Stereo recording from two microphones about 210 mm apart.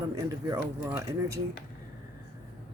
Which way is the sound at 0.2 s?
15° right (ahead or behind).